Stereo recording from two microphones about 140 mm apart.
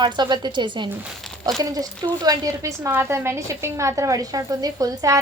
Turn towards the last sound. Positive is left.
turn(degrees=-25)  # may be behind; listen again after turning